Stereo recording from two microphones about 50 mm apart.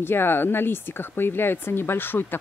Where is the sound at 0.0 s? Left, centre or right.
Left.